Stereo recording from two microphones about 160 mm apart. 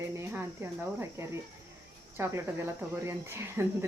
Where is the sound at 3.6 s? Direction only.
15° right (ahead or behind).